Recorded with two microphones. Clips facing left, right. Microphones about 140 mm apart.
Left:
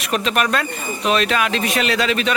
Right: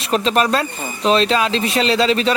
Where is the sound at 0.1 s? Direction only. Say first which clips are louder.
Right 3 dB; 30° right (ahead or behind).